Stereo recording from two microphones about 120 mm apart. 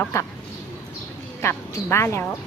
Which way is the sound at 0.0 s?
20° left (ahead or behind).